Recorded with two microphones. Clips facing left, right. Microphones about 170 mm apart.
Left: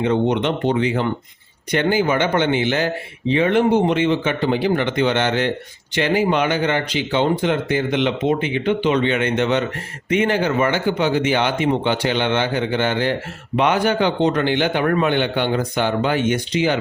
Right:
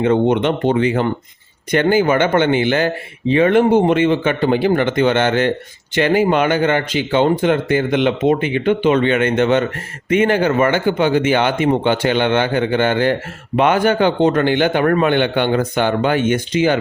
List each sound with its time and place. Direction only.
0.0 s speech: 50° right (ahead or behind)